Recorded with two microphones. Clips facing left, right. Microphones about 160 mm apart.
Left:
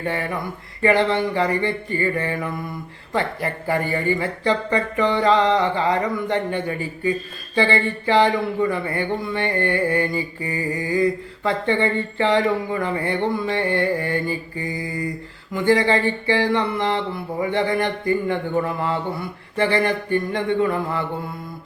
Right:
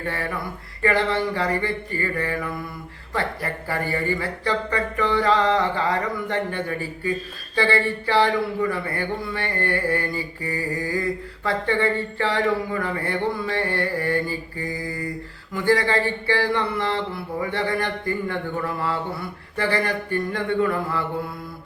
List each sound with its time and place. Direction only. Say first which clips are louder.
0.0 s speech: left 3 dB; 20° left (ahead or behind)